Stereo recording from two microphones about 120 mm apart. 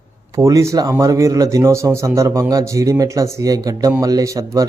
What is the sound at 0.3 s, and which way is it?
Speech, 25° right (ahead or behind).